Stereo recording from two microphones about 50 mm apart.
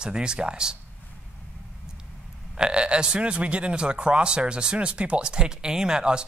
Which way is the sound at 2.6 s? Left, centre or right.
Centre.